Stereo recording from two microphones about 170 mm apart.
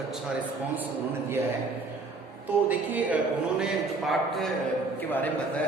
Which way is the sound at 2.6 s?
10° right (ahead or behind).